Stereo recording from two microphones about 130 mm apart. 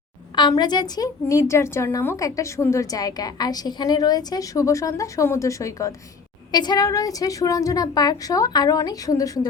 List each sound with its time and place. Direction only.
0.3 s a woman's voice: 35° left (ahead or behind)